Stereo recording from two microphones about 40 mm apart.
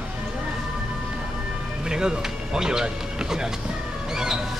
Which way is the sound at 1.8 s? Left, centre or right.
Centre.